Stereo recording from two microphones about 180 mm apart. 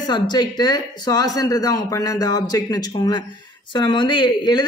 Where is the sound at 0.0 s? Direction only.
25° left (ahead or behind).